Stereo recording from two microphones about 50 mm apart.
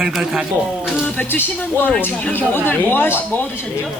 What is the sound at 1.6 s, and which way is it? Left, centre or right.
Speech, left.